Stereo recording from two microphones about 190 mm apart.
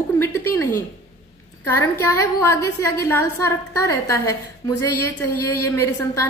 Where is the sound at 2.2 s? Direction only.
15° left (ahead or behind).